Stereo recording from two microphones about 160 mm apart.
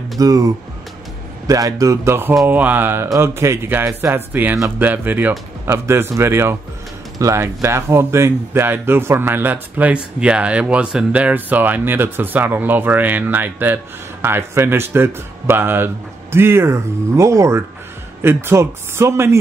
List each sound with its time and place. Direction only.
0.2 s speech: 20° right (ahead or behind)
1.5 s speech: 20° right (ahead or behind)